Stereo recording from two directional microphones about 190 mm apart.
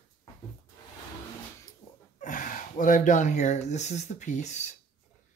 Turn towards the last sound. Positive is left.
turn(degrees=40)  # may be behind; listen again after turning